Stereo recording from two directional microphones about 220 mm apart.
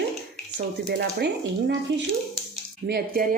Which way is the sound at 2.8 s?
45° right (ahead or behind).